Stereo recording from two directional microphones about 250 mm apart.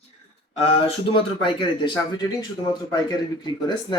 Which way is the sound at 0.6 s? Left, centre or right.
Left.